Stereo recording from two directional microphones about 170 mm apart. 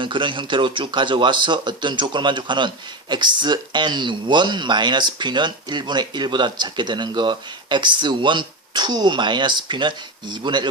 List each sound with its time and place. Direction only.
0.0 s speech: 30° right (ahead or behind)